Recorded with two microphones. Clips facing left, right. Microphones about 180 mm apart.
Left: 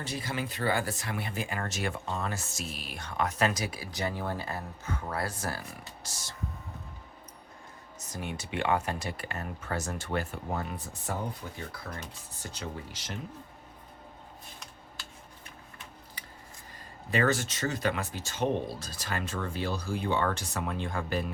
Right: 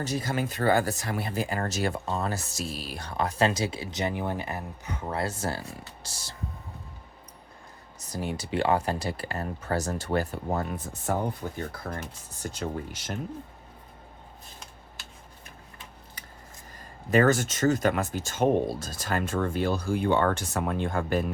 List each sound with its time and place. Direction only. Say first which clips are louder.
0.0 s speech: right 6 dB; 40° right (ahead or behind)
8.1 s speech: right 6 dB; 35° right (ahead or behind)
17.1 s speech: right 6 dB; 45° right (ahead or behind)